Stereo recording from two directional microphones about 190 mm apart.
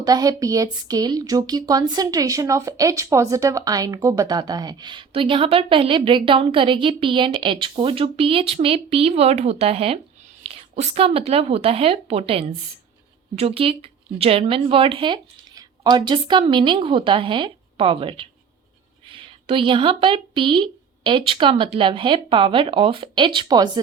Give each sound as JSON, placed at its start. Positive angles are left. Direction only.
{"t": 0.0, "sound": "speech", "side_deg": -20}